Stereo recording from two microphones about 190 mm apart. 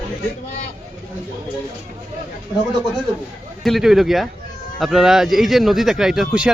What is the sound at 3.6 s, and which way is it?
Speech, centre (ahead or behind).